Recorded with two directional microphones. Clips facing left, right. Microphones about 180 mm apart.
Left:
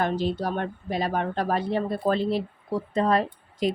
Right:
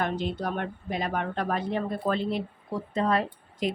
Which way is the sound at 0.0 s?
35° left (ahead or behind).